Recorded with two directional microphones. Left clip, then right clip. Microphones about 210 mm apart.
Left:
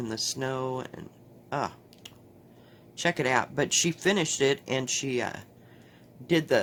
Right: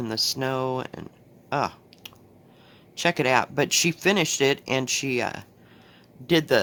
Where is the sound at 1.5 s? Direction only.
20° right (ahead or behind).